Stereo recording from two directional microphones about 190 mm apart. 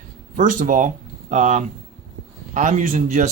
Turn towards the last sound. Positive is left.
turn(degrees=-40)  # may be behind; listen again after turning